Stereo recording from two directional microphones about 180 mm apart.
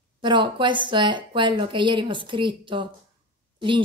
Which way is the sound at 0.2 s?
25° right (ahead or behind).